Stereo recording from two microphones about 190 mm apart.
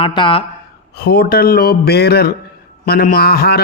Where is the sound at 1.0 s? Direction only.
50° left (ahead or behind).